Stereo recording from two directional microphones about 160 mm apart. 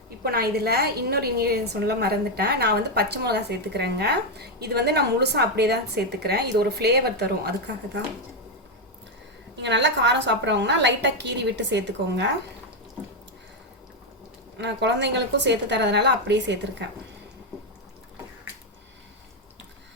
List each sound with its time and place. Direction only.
0.2 s a woman's voice: 75° right (ahead or behind); by 8.1 s 90° right
9.6 s a woman's voice: 90° right
14.6 s a woman's voice: 90° right